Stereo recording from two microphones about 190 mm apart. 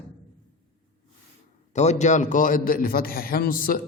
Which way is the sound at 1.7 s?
35° left (ahead or behind).